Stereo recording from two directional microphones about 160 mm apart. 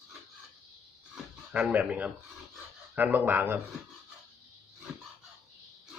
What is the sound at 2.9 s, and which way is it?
Speech, 10° right (ahead or behind).